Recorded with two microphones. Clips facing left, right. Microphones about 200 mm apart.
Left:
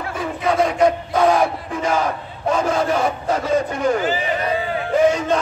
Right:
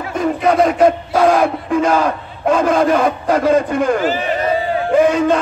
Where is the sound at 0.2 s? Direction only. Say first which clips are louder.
Right 6 dB; 50° right (ahead or behind).